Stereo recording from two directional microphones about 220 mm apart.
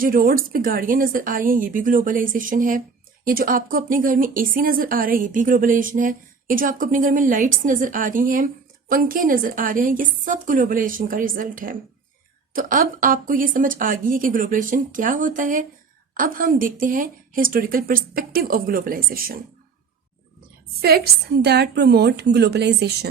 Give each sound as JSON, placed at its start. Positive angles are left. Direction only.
{"t": 0.0, "sound": "speech", "side_deg": -40}
{"t": 20.8, "sound": "a woman's voice", "side_deg": -45}